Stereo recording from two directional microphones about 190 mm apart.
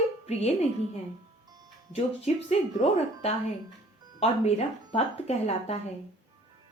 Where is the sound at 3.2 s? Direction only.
30° left (ahead or behind).